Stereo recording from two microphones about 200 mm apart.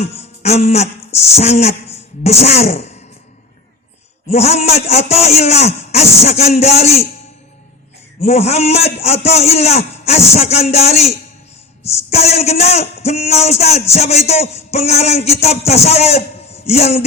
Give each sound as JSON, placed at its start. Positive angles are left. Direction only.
{"t": 0.0, "sound": "speech", "side_deg": 30}
{"t": 4.3, "sound": "speech", "side_deg": 30}
{"t": 8.2, "sound": "speech", "side_deg": 30}